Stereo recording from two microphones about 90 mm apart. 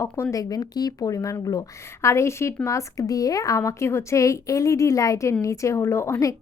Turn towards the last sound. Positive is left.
turn(degrees=30)  # may be behind; listen again after turning